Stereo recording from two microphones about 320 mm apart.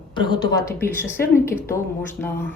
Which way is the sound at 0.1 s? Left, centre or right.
Centre.